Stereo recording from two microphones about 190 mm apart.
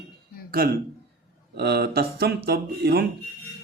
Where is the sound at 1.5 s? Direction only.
60° right (ahead or behind).